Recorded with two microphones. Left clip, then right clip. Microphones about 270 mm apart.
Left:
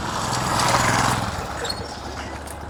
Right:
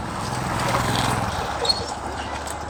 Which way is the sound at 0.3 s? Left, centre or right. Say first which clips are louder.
Left 4 dB; left.